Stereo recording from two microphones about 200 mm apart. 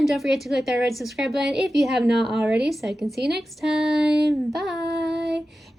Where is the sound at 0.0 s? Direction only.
Centre (ahead or behind).